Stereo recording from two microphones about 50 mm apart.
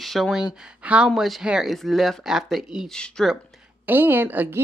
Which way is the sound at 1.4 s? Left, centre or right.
Centre.